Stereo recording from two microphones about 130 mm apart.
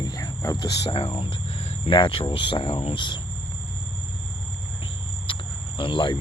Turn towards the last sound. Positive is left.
turn(degrees=40)  # may be behind; listen again after turning